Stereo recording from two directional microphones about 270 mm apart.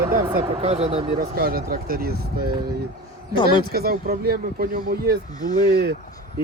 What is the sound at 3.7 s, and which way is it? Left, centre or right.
Speech, right.